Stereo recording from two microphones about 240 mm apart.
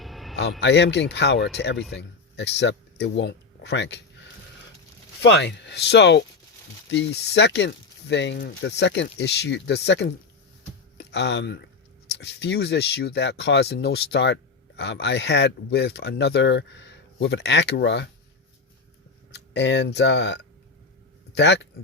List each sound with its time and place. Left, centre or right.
0.0 s a sound: centre
0.6 s speech: left
5.2 s speech: left
19.3 s speech: left